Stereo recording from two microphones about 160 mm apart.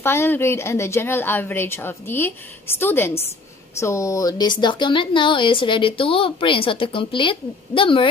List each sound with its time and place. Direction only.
0.0 s a woman's voice: 15° left (ahead or behind); by 8.1 s 30° left (ahead or behind)